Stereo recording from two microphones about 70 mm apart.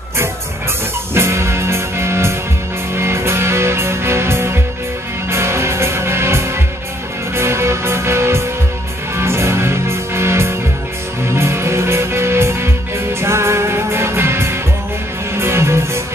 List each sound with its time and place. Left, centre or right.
1.1 s music: right